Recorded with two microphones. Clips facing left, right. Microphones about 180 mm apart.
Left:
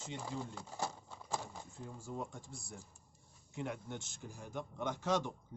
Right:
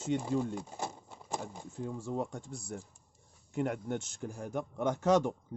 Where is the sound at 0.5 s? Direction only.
20° right (ahead or behind).